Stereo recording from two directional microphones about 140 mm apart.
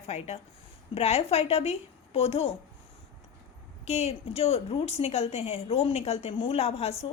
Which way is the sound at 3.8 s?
50° left (ahead or behind).